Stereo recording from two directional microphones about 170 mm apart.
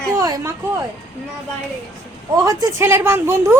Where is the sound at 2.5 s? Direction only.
15° right (ahead or behind).